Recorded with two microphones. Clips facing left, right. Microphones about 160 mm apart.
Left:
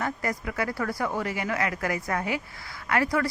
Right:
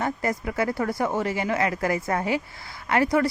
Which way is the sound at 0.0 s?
25° right (ahead or behind).